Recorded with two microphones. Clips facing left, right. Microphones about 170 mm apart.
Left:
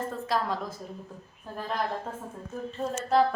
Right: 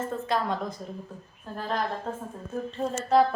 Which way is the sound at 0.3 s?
Centre (ahead or behind).